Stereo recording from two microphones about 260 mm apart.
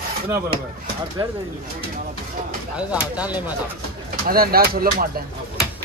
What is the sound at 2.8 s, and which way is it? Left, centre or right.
Speech, centre.